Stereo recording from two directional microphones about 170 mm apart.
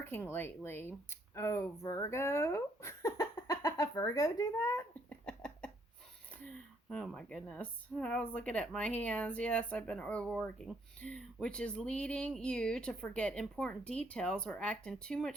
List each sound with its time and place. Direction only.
0.0 s speech: 10° left (ahead or behind)
5.0 s a sound: 5° left (ahead or behind)
6.4 s speech: 5° left (ahead or behind)